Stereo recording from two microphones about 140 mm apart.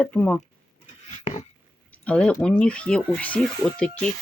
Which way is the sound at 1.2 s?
55° left (ahead or behind).